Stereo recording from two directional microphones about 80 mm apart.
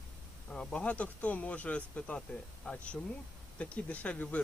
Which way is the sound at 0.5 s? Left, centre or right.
Centre.